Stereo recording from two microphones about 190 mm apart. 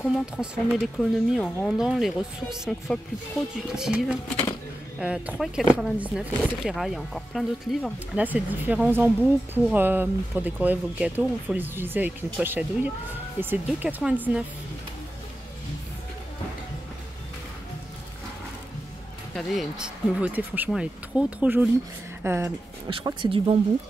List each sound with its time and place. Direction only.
0.7 s speech: centre (ahead or behind)
19.3 s speech: 5° right (ahead or behind)
22.8 s speech: 25° right (ahead or behind)